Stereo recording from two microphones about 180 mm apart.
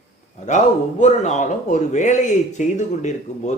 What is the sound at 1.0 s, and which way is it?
Speech, 40° left (ahead or behind).